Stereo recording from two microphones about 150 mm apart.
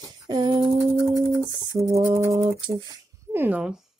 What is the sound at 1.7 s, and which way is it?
Speech, 40° right (ahead or behind).